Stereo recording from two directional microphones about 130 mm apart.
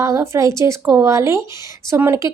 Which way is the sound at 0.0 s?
25° right (ahead or behind).